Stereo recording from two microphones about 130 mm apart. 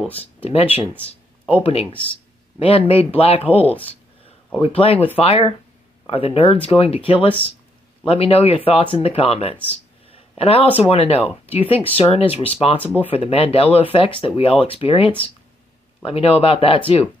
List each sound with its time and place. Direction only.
0.1 s speech: 50° left (ahead or behind)
4.6 s speech: 45° left (ahead or behind)
9.7 s a sound: 50° left (ahead or behind)
10.8 s speech: 50° left (ahead or behind)